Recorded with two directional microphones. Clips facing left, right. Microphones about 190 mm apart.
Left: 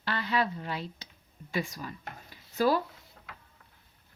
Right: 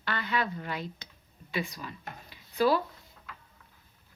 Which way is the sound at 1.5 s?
45° left (ahead or behind).